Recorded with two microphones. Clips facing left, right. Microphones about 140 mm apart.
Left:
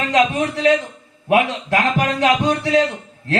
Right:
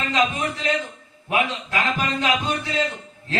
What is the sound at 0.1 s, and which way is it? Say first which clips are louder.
A man's voice: left 6 dB; 70° left (ahead or behind).